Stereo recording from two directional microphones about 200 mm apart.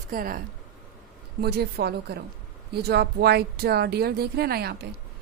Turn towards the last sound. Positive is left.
turn(degrees=-50)  # may be behind; listen again after turning